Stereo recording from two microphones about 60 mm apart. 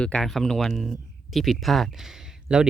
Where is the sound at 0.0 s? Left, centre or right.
Centre.